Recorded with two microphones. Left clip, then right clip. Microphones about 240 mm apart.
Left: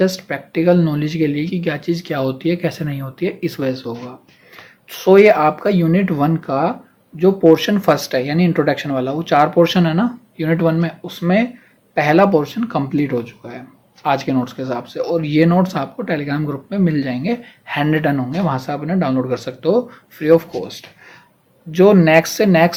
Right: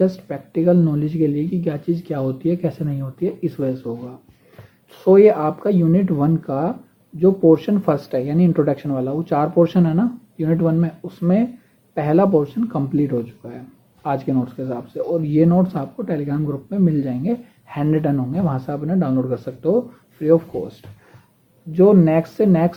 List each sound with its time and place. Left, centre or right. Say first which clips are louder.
0.0 s speech: left 2 dB; centre
4.9 s speech: left 2 dB; centre
12.7 s speech: left 3 dB; centre
21.7 s speech: left 3 dB; centre